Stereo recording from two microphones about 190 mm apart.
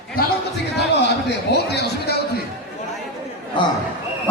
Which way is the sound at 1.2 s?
60° left (ahead or behind).